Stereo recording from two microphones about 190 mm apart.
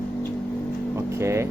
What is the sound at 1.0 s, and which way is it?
Speech, 15° right (ahead or behind).